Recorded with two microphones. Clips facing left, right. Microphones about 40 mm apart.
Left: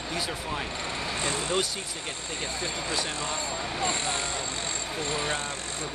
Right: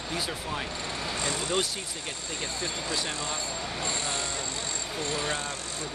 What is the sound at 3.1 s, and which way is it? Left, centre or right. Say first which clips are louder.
Speech: left 2 dB; left.